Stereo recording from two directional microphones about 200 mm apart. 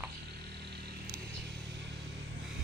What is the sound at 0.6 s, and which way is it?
Vehicle, 55° right (ahead or behind).